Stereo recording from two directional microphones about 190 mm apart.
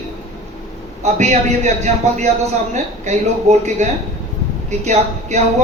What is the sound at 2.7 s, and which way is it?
A man's voice, 40° right (ahead or behind).